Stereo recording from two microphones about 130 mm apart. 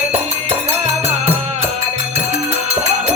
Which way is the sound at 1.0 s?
55° right (ahead or behind).